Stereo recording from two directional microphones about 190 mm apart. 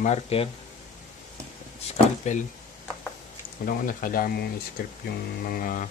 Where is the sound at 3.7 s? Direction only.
45° left (ahead or behind).